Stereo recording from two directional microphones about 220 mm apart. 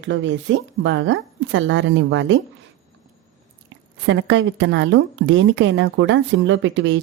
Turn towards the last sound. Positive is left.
turn(degrees=-60)  # may be behind; listen again after turning